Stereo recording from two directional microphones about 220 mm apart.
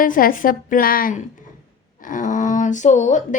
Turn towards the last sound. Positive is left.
turn(degrees=35)  # may be behind; listen again after turning